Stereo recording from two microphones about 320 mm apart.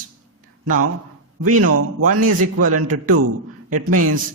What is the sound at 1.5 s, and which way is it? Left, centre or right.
A man's voice, right.